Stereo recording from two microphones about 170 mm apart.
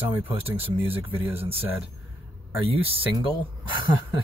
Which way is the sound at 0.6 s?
35° right (ahead or behind).